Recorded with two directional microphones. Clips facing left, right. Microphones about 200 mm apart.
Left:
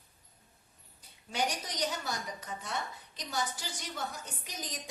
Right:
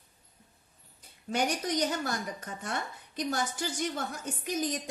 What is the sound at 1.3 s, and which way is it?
A woman's voice, 50° right (ahead or behind).